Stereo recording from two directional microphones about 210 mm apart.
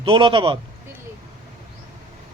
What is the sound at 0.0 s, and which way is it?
Speech, 25° right (ahead or behind).